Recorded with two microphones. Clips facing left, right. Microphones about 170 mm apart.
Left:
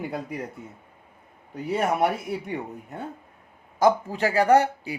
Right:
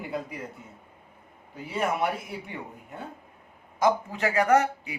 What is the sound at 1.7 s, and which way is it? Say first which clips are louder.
Speech: left 4 dB; 45° left (ahead or behind).